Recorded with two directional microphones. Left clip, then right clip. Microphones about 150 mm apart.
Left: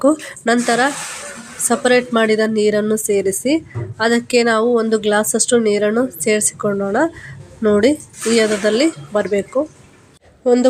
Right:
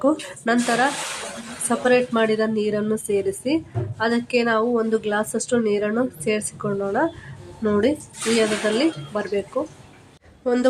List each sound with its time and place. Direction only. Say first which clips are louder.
0.0 s a woman's voice: left 6 dB; 25° left (ahead or behind)
10.4 s speech: left 7 dB; 25° left (ahead or behind)